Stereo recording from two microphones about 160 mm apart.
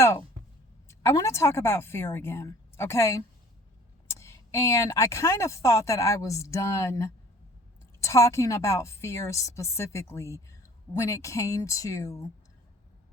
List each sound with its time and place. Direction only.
0.9 s a woman's voice: 20° left (ahead or behind)